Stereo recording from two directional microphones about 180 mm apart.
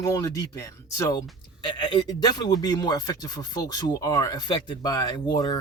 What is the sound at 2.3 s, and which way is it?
Speech, 20° left (ahead or behind).